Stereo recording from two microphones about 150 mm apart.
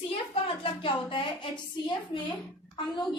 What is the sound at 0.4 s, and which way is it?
A woman's voice, 35° left (ahead or behind).